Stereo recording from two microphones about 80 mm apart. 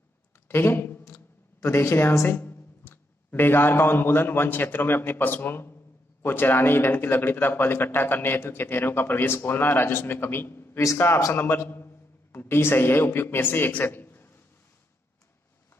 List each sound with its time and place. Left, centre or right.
0.5 s a man's voice: left